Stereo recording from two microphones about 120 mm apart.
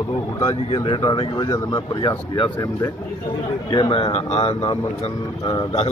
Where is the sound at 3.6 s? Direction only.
40° left (ahead or behind).